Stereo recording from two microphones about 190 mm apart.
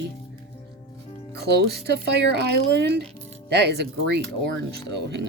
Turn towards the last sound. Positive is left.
turn(degrees=-65)  # may be behind; listen again after turning